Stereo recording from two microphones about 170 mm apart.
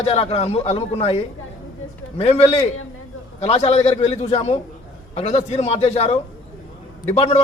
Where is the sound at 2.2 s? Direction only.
35° left (ahead or behind).